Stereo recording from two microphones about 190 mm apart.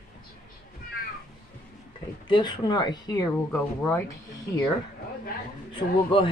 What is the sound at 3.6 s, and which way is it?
Speech, 10° left (ahead or behind).